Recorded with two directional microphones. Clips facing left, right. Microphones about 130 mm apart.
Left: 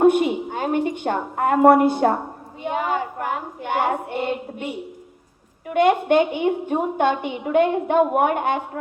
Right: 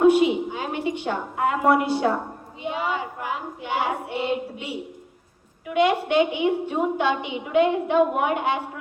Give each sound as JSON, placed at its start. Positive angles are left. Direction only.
{"t": 0.0, "sound": "a woman's voice", "side_deg": 50}